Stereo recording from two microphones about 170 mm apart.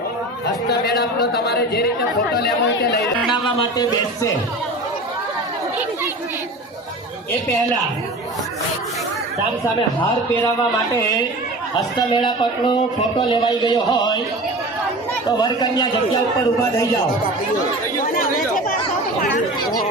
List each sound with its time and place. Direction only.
0.7 s speech: 75° left (ahead or behind)
3.3 s speech: 30° left (ahead or behind)
11.9 s speech: 25° left (ahead or behind)
15.3 s speech: 25° left (ahead or behind)
18.0 s speech: 55° left (ahead or behind)